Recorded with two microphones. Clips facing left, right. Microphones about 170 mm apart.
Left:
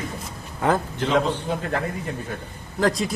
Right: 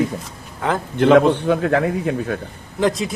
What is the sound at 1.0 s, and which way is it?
A man's voice, 65° right (ahead or behind).